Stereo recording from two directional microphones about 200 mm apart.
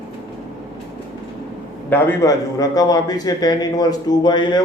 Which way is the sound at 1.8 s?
15° left (ahead or behind).